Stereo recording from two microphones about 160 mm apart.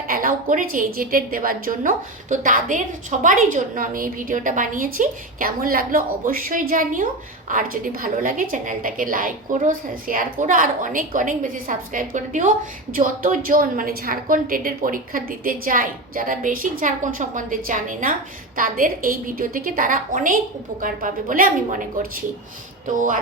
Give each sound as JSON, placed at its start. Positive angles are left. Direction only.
{"t": 0.1, "sound": "a woman's voice", "side_deg": -60}